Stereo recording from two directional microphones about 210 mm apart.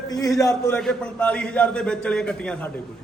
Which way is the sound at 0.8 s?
5° left (ahead or behind).